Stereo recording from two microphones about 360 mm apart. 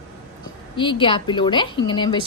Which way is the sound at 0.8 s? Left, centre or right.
Centre.